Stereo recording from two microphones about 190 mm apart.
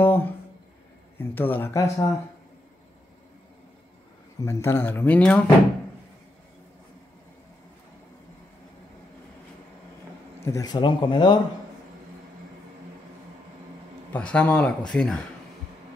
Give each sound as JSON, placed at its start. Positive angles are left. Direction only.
{"t": 0.0, "sound": "a sound", "side_deg": 10}
{"t": 1.1, "sound": "speech", "side_deg": 10}
{"t": 4.4, "sound": "speech", "side_deg": 15}
{"t": 10.4, "sound": "speech", "side_deg": 20}
{"t": 14.1, "sound": "speech", "side_deg": 5}